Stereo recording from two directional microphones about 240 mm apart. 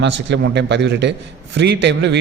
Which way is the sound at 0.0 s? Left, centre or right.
Right.